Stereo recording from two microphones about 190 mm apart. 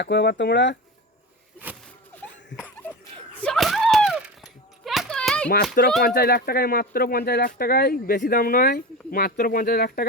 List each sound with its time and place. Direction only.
0.0 s speech: 65° left (ahead or behind)
3.4 s a sound: centre (ahead or behind)
6.0 s speech: 55° left (ahead or behind)